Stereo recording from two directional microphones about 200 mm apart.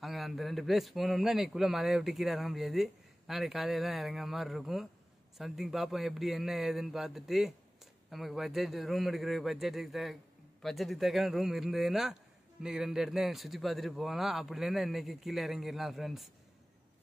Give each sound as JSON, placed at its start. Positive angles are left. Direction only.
{"t": 0.0, "sound": "a man's voice", "side_deg": 0}